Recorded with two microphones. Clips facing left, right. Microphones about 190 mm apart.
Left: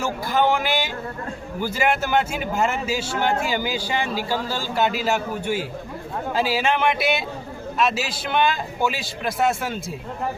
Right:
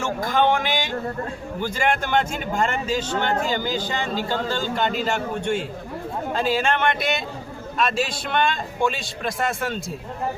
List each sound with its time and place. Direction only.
0.3 s a man's voice: 10° left (ahead or behind)